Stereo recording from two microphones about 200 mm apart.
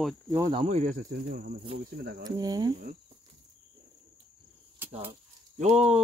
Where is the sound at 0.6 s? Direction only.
35° right (ahead or behind).